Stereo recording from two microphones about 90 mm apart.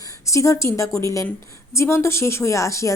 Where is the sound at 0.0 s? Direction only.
35° left (ahead or behind).